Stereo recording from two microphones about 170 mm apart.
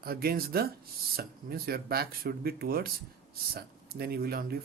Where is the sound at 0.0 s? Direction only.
60° right (ahead or behind).